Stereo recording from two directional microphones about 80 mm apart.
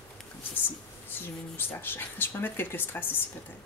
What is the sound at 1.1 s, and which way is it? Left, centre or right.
Speech, left.